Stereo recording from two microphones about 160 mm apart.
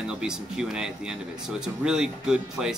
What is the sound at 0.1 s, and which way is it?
Speech, 5° right (ahead or behind).